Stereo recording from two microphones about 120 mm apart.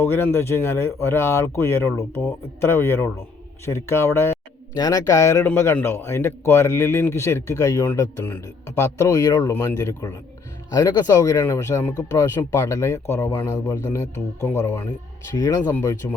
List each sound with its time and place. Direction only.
0.0 s a man's voice: 20° left (ahead or behind)
4.7 s a man's voice: 30° left (ahead or behind)